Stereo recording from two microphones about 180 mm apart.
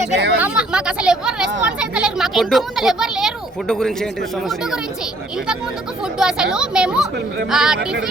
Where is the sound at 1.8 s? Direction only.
5° right (ahead or behind).